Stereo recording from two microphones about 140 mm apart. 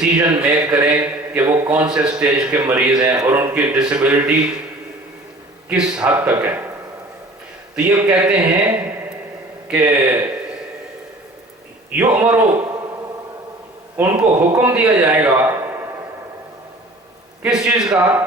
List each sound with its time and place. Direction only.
0.0 s speech: 5° right (ahead or behind)
5.6 s speech: 5° right (ahead or behind)
7.8 s speech: 10° right (ahead or behind)
11.9 s speech: 10° right (ahead or behind)
13.9 s a man's voice: 10° right (ahead or behind)
15.4 s a sound: 20° right (ahead or behind)
17.4 s speech: 10° right (ahead or behind)